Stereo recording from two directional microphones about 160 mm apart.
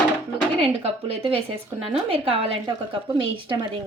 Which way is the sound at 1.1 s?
35° right (ahead or behind).